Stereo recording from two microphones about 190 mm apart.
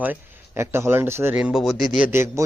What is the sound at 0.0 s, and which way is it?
Speech, 10° right (ahead or behind).